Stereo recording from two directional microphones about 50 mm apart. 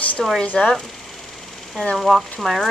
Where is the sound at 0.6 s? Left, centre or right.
Centre.